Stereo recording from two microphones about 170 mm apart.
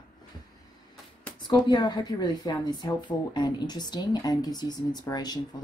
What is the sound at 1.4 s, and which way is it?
Speech, 25° left (ahead or behind).